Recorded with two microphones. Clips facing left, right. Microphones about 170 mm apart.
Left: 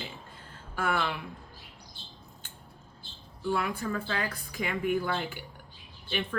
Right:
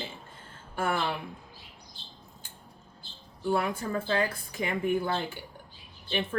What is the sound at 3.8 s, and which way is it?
Speech, 25° right (ahead or behind).